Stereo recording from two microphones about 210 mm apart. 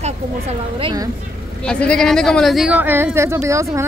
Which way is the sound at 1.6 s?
5° left (ahead or behind).